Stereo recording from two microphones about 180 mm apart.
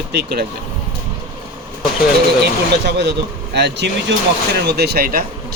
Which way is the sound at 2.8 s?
70° right (ahead or behind).